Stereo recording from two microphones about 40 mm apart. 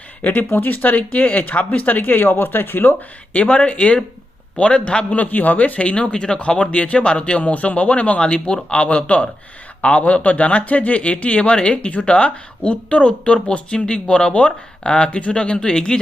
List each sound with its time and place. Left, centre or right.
0.2 s speech: left
2.0 s speech: left
3.3 s speech: left
5.1 s speech: left
8.2 s speech: left